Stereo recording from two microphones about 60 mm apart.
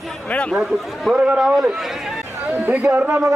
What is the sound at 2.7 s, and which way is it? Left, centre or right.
Speech, right.